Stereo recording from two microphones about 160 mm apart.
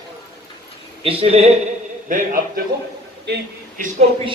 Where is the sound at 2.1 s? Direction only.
55° right (ahead or behind).